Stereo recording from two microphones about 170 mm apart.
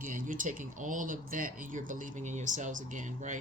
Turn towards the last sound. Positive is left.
turn(degrees=-50)  # may be behind; listen again after turning